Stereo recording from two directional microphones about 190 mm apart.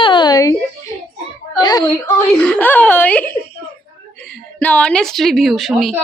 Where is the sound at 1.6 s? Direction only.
20° left (ahead or behind).